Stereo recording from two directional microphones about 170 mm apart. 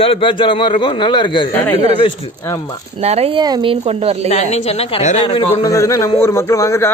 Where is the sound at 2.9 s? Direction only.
40° right (ahead or behind).